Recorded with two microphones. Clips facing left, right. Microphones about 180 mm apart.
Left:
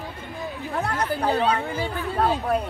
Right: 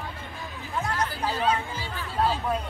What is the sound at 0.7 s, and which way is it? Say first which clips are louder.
Chatter: left 3 dB; 65° left (ahead or behind).